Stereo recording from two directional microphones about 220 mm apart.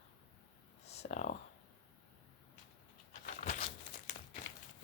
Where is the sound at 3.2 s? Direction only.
35° left (ahead or behind).